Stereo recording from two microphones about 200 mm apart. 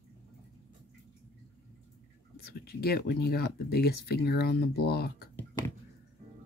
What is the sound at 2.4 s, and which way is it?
Speech, 50° left (ahead or behind).